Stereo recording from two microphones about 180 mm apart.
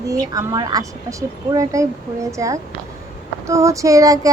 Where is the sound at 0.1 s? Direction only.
20° right (ahead or behind).